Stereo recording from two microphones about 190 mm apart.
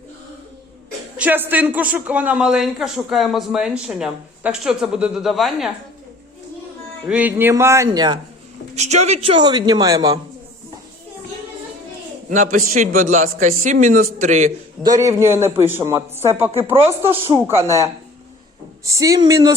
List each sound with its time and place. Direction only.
1.1 s a woman's voice: 10° right (ahead or behind)
7.1 s a man's voice: 10° right (ahead or behind)
8.7 s a woman's voice: 35° right (ahead or behind); by 10.2 s 20° right (ahead or behind)
12.3 s a man's voice: 40° right (ahead or behind)
14.8 s a man's voice: 15° right (ahead or behind)
16.7 s a woman's voice: 30° right (ahead or behind)
17.2 s a man's voice: 15° right (ahead or behind)
18.9 s a man's voice: 15° right (ahead or behind)